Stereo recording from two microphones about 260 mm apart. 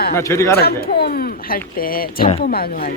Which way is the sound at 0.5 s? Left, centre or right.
Left.